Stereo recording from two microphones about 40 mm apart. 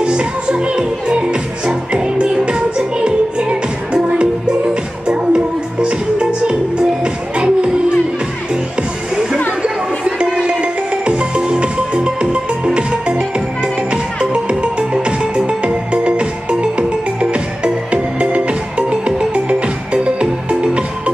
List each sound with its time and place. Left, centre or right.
0.0 s music: right
9.6 s music: right